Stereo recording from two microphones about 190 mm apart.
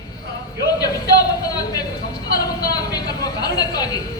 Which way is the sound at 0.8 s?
20° left (ahead or behind).